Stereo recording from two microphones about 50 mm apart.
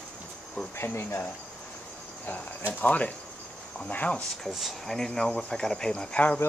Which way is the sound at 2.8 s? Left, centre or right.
Left.